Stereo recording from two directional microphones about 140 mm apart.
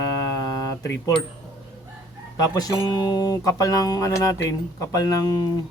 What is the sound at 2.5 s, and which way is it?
Speech, 30° left (ahead or behind).